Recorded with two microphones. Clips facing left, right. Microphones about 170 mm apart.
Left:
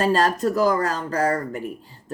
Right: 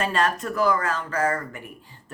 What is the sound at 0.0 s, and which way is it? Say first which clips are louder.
Speech: left 5 dB; 35° left (ahead or behind).